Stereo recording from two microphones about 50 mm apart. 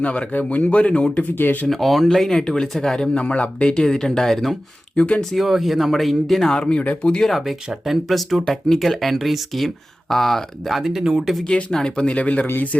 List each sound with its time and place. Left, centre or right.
0.0 s speech: left
1.2 s speech: left
1.6 s speech: centre; by 3.8 s left
3.8 s speech: centre
4.9 s speech: left
5.3 s speech: centre
6.5 s speech: centre
7.3 s speech: centre
11.4 s speech: centre; by 12.8 s left